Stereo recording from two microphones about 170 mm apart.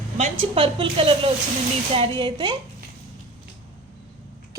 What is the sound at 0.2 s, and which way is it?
A woman's voice, 30° right (ahead or behind).